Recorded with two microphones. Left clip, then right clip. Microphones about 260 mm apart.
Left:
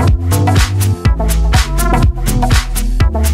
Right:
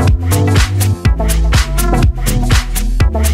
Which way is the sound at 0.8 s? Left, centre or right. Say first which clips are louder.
Even; centre.